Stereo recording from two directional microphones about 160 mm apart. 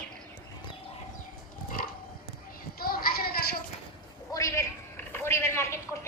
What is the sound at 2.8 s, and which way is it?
Child singing, 70° left (ahead or behind).